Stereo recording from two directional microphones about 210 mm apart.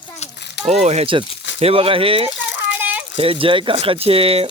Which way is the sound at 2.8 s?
10° right (ahead or behind).